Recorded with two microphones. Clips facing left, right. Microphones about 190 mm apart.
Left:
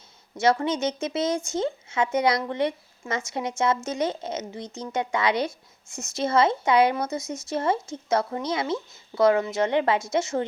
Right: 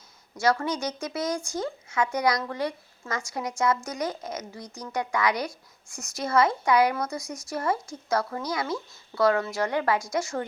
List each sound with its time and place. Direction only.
0.3 s speech: 20° left (ahead or behind)